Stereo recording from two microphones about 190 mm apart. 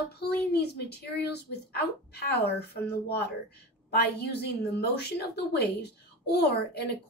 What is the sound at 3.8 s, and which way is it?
A woman's voice, 55° left (ahead or behind).